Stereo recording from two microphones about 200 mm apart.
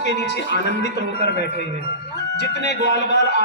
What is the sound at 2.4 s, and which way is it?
A man's voice, 55° left (ahead or behind).